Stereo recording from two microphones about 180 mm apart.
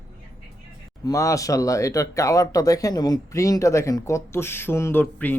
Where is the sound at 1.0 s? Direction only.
20° left (ahead or behind).